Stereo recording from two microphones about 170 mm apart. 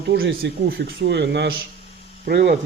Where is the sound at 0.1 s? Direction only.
85° right.